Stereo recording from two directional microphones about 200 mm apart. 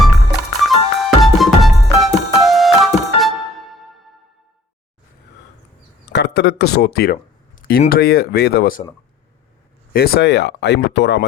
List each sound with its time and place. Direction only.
0.0 s music: centre (ahead or behind)
6.1 s speech: 55° left (ahead or behind)
9.9 s speech: 50° left (ahead or behind)